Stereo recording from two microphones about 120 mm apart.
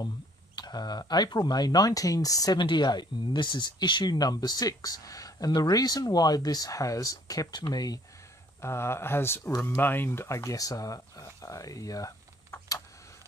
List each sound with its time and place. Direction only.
0.6 s speech: 35° left (ahead or behind)
8.5 s speech: 20° left (ahead or behind)